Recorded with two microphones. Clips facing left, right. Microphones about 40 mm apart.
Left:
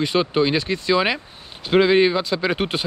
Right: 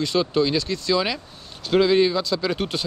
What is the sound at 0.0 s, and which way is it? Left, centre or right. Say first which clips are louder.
Speech: left 2 dB; left.